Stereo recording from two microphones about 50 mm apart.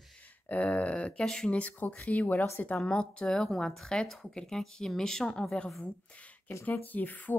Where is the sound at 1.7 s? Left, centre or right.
Left.